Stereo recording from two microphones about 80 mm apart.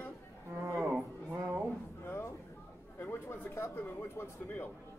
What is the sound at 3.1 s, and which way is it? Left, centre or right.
Speech, left.